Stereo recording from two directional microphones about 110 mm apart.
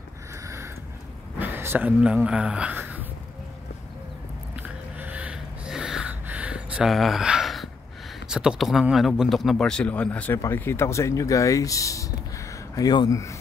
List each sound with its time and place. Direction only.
1.4 s speech: 20° right (ahead or behind)
4.6 s gasp: 15° right (ahead or behind)
8.3 s speech: 5° right (ahead or behind); by 13.4 s 30° left (ahead or behind)